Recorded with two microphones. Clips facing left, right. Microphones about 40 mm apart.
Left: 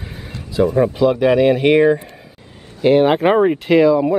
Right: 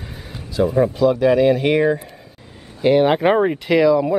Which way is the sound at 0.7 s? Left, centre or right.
Centre.